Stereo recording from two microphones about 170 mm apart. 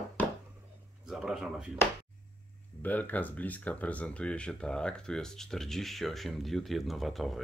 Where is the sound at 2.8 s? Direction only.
10° left (ahead or behind).